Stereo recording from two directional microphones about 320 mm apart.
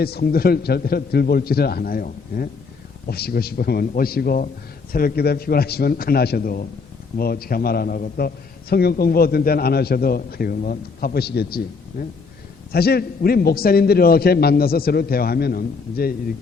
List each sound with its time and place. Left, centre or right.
0.0 s a man's voice: left